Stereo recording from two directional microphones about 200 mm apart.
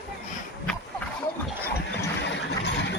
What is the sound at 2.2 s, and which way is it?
Vehicle, 60° left (ahead or behind).